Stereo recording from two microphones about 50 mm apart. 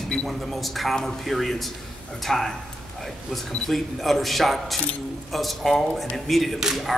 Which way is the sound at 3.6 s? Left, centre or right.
Centre.